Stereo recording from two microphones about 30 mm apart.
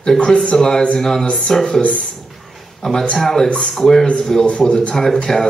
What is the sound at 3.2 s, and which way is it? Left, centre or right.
Speech, centre.